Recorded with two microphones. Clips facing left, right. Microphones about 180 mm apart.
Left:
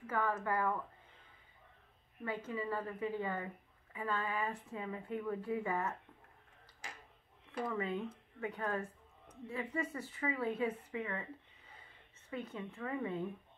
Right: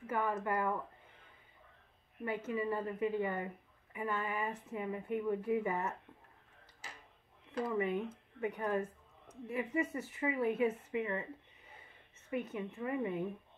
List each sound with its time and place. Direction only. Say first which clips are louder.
0.0 s a woman's voice: right 1 dB; 20° right (ahead or behind)
2.2 s speech: right 3 dB; 20° right (ahead or behind)
7.6 s speech: right 3 dB; 15° right (ahead or behind)
12.3 s a woman's voice: right 4 dB; 20° right (ahead or behind)